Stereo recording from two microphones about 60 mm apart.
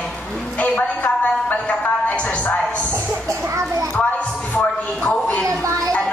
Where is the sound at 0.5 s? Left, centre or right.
Left.